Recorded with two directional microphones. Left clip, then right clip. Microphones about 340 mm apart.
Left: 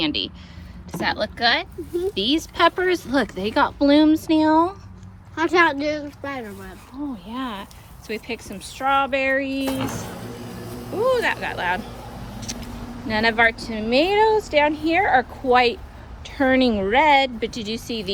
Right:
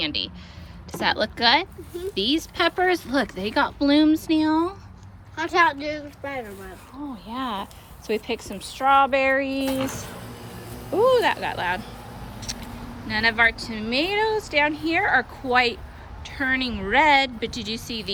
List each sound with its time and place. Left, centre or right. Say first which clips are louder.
0.0 s speech: left 3 dB; centre
5.3 s speech: left 2 dB; centre
7.3 s speech: right 1 dB; centre
10.2 s music: left 4 dB; centre
10.9 s speech: right 2 dB; centre
12.5 s vehicle: left 2 dB; left
13.1 s speech: left 2 dB; centre